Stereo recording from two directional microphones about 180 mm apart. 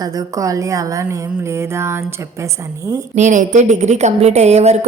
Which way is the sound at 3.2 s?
40° right (ahead or behind).